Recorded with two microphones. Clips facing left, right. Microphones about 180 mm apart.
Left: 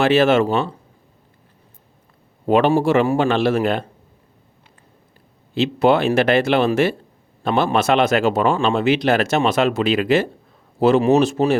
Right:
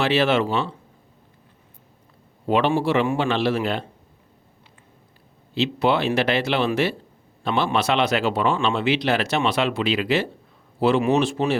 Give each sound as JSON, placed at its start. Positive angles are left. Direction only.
{"t": 0.0, "sound": "speech", "side_deg": 45}
{"t": 2.5, "sound": "speech", "side_deg": 45}
{"t": 5.5, "sound": "speech", "side_deg": 50}